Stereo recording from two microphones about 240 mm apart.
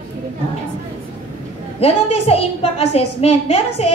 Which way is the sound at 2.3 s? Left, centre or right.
Left.